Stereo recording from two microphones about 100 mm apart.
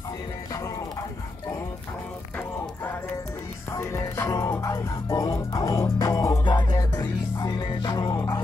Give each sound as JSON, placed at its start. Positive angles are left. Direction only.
{"t": 3.7, "sound": "music", "side_deg": 30}
{"t": 6.4, "sound": "music", "side_deg": 45}